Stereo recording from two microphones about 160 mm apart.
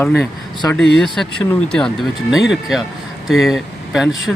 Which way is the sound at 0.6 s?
15° left (ahead or behind).